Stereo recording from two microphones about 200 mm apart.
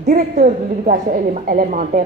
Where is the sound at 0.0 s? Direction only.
40° right (ahead or behind).